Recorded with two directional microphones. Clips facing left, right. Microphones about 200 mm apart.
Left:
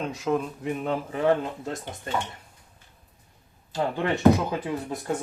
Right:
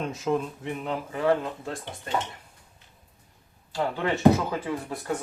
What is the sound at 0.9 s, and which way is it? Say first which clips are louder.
Speech: left 1 dB; 25° left (ahead or behind).